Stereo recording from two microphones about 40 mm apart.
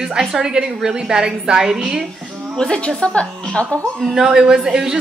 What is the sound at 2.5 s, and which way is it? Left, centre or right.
Speech, centre.